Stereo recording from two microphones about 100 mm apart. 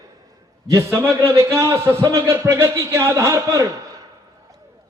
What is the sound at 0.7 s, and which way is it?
A man's voice, 30° right (ahead or behind).